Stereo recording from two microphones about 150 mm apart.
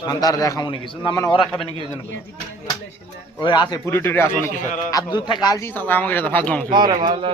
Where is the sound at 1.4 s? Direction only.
Centre (ahead or behind).